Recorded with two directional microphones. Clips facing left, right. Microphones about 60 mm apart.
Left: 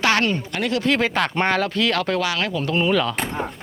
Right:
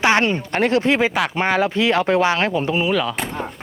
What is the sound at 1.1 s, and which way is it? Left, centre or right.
Speech, centre.